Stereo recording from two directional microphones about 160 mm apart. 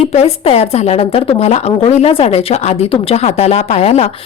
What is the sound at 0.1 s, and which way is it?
A woman's voice, 40° left (ahead or behind).